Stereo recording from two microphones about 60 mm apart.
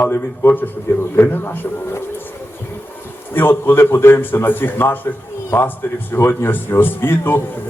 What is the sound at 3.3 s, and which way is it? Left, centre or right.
Speech, left.